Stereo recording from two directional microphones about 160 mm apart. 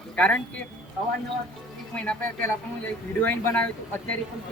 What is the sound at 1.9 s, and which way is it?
A man's voice, 10° left (ahead or behind).